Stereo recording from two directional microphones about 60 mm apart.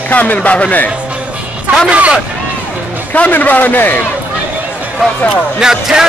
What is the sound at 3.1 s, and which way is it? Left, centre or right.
Speech, left.